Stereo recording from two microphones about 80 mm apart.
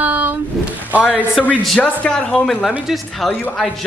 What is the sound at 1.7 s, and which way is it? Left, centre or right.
Speech, centre.